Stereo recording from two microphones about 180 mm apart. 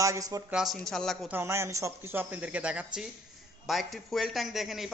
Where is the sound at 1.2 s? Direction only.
15° right (ahead or behind).